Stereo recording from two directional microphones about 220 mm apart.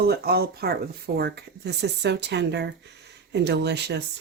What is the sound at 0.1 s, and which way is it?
A woman's voice, 45° right (ahead or behind).